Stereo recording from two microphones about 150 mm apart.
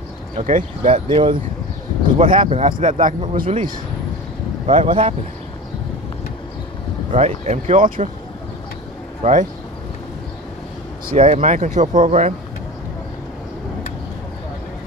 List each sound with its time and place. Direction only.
0.4 s speech: 60° right (ahead or behind)
1.0 s speech: 30° right (ahead or behind)
2.4 s speech: 50° right (ahead or behind)
4.6 s speech: 35° right (ahead or behind)
7.1 s speech: 45° right (ahead or behind)
9.2 s speech: 55° right (ahead or behind)
11.1 s speech: 50° right (ahead or behind)